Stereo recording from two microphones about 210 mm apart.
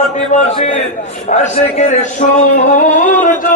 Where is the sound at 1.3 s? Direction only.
35° left (ahead or behind).